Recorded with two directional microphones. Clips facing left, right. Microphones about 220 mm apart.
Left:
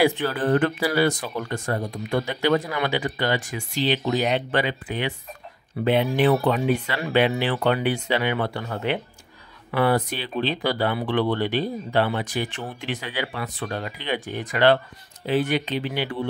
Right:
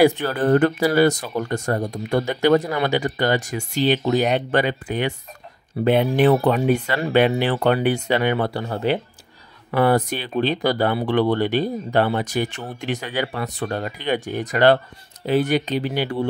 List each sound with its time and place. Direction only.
0.0 s speech: 40° right (ahead or behind)
9.7 s speech: 45° right (ahead or behind)